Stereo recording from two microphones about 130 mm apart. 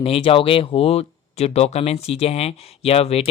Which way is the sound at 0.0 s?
45° left (ahead or behind).